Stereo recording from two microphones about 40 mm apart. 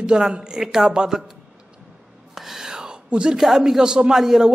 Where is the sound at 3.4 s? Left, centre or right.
Centre.